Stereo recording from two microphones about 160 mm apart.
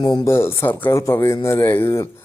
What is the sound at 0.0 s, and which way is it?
Speech, 25° left (ahead or behind).